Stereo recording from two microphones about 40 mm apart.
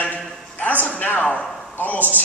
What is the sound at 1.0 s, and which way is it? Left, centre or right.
A man's voice, left.